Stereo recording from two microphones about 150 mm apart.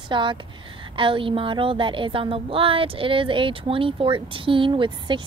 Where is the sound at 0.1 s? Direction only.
35° right (ahead or behind).